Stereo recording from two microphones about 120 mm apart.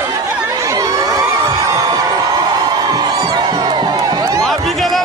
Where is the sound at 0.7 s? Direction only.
25° right (ahead or behind).